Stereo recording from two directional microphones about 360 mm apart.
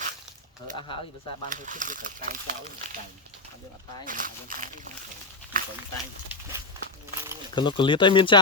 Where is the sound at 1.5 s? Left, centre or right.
Right.